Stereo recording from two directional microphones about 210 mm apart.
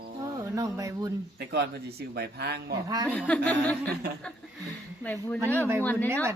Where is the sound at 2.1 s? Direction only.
50° right (ahead or behind).